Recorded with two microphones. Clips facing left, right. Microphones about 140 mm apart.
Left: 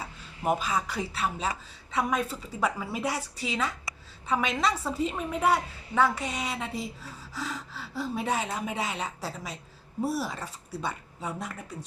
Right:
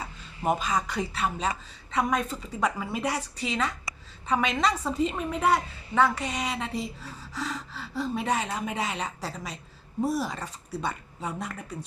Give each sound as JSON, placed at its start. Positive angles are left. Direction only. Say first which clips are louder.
{"t": 0.0, "sound": "a woman's voice", "louder": "right 1 dB", "side_deg": 5}